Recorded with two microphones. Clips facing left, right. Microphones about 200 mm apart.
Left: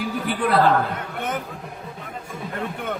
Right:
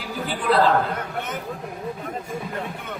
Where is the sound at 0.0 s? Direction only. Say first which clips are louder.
Left 4 dB; 60° left (ahead or behind).